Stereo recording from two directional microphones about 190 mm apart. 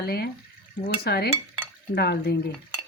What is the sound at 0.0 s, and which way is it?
Speech, 55° left (ahead or behind).